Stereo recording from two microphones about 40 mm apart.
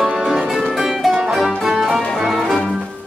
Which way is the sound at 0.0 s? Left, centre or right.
Centre.